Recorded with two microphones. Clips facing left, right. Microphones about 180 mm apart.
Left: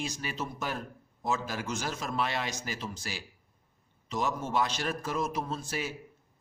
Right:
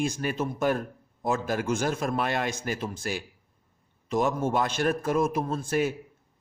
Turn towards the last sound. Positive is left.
turn(degrees=-55)  # may be behind; listen again after turning